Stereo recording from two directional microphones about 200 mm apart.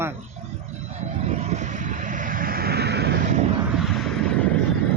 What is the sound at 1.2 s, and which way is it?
Vehicle, 30° right (ahead or behind).